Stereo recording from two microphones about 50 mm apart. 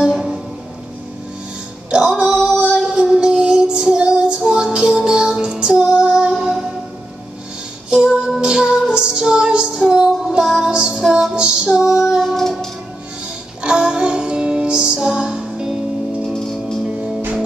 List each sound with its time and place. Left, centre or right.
0.0 s music: centre
1.9 s music: centre
2.7 s child singing: centre
3.9 s music: centre
7.9 s music: centre
11.0 s music: centre
11.3 s music: centre
12.2 s music: centre
13.6 s music: centre
16.3 s music: centre